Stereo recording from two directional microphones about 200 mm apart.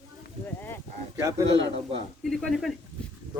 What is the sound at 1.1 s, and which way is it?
Speech, 15° right (ahead or behind).